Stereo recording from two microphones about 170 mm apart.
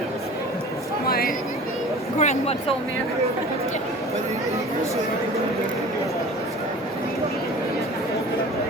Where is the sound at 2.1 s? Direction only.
40° left (ahead or behind).